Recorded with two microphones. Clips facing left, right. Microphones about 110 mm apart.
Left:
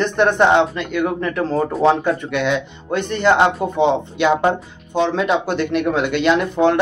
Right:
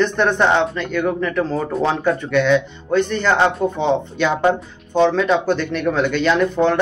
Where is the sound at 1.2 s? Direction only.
25° left (ahead or behind).